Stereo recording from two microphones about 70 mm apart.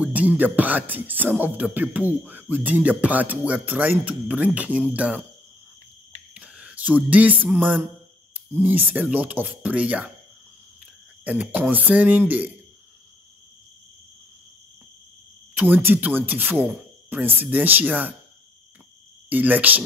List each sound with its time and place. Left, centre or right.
0.0 s speech: right
6.3 s a sound: centre
7.1 s speech: right
8.3 s a sound: right
8.9 s speech: right
11.2 s speech: right
15.5 s speech: right
19.2 s speech: right